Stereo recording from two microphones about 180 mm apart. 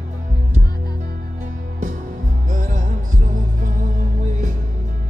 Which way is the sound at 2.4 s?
45° right (ahead or behind).